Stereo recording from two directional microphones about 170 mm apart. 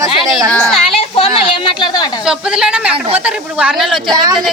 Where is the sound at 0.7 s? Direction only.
35° left (ahead or behind).